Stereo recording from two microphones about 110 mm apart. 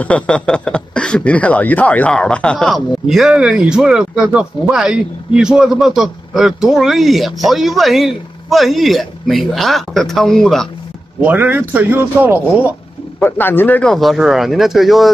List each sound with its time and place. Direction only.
0.0 s speech: 10° left (ahead or behind)
3.1 s speech: 5° right (ahead or behind)
11.1 s speech: 15° right (ahead or behind)
13.2 s speech: 20° left (ahead or behind)
13.9 s speech: centre (ahead or behind)